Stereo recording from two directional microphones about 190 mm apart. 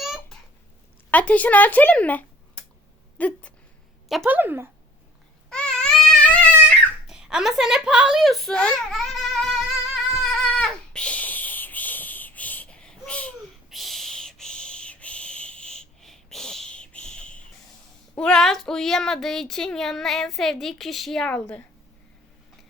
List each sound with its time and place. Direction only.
0.0 s babbling: centre (ahead or behind)
1.1 s speech: 5° left (ahead or behind)
4.1 s speech: 5° right (ahead or behind)
5.5 s baby cry: 5° left (ahead or behind)
7.1 s a sound: 5° right (ahead or behind)
18.2 s speech: 5° left (ahead or behind)